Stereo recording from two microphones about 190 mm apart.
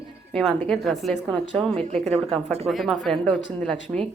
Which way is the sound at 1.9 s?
35° right (ahead or behind).